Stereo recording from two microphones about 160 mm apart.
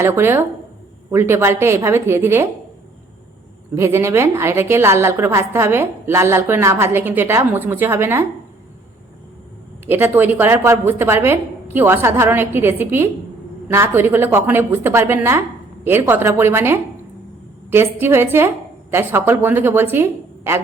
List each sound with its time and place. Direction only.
0.0 s a woman's voice: 15° right (ahead or behind)
3.8 s a woman's voice: 15° right (ahead or behind)
9.8 s a woman's voice: 15° right (ahead or behind)